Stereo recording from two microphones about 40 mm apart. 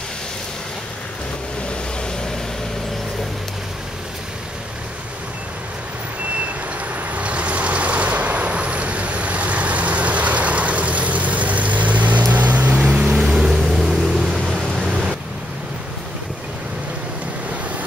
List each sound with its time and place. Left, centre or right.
7.2 s vehicle: right; by 14.9 s centre
14.9 s pink noise: right